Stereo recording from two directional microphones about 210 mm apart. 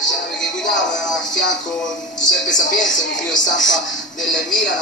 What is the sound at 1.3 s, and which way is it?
Music, 60° left (ahead or behind).